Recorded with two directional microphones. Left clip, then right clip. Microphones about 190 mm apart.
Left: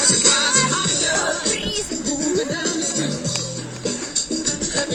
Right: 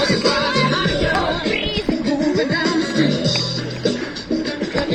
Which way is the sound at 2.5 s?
10° right (ahead or behind).